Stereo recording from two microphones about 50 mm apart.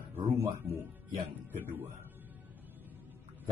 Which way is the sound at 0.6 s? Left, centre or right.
Right.